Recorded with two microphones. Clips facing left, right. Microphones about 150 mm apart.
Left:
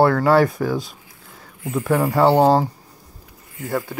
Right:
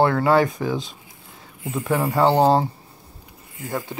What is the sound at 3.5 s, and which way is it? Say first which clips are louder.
Speech: left 4 dB; 20° right (ahead or behind).